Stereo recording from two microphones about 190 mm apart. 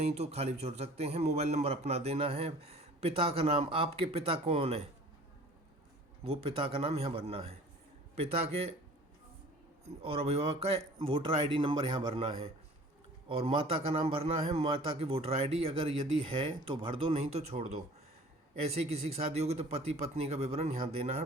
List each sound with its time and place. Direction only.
0.0 s speech: 35° right (ahead or behind)
6.2 s speech: 30° right (ahead or behind)
9.8 s speech: 30° right (ahead or behind)